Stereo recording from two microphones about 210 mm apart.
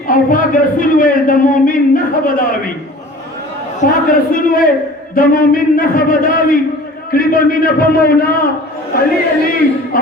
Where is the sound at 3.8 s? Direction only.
40° left (ahead or behind).